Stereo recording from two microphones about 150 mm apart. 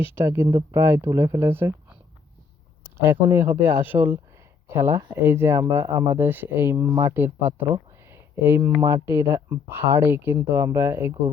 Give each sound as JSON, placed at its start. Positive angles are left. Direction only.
{"t": 0.2, "sound": "speech", "side_deg": -15}
{"t": 3.0, "sound": "speech", "side_deg": -15}